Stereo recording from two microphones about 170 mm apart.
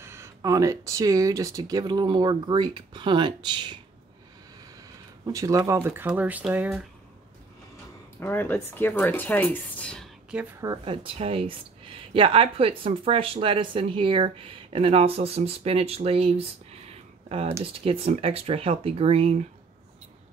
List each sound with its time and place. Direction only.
0.0 s speech: 15° right (ahead or behind)
5.2 s speech: 20° right (ahead or behind)
8.2 s speech: 15° left (ahead or behind)
10.6 s speech: 25° right (ahead or behind)